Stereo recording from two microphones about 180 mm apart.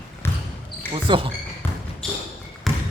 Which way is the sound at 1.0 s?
30° right (ahead or behind).